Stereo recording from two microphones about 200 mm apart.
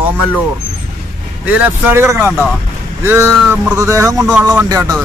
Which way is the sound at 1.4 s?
10° right (ahead or behind).